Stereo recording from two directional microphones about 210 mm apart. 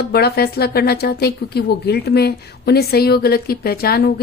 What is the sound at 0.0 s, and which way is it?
Speech, 50° left (ahead or behind).